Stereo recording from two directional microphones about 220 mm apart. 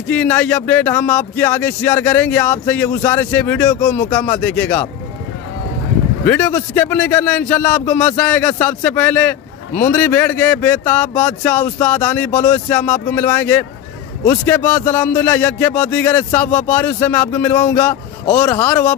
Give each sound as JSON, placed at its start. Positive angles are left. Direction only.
{"t": 0.1, "sound": "a man's voice", "side_deg": 5}
{"t": 6.2, "sound": "a man's voice", "side_deg": 10}